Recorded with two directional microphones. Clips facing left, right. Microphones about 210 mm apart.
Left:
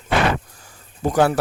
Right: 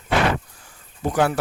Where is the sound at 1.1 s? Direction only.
40° left (ahead or behind).